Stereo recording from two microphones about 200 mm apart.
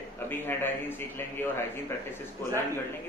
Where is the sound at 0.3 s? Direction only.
10° left (ahead or behind).